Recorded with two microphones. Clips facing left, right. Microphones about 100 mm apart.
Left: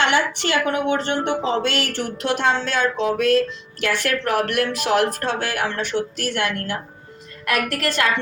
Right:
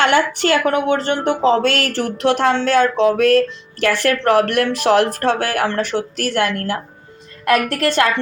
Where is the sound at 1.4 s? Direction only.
40° right (ahead or behind).